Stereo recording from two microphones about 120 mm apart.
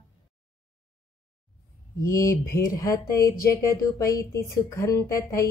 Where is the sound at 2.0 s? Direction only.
25° left (ahead or behind).